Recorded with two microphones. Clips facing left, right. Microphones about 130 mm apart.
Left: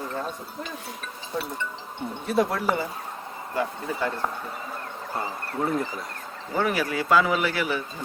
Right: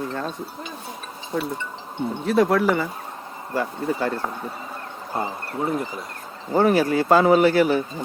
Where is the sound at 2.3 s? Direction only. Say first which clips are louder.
Right 5 dB; 90° right.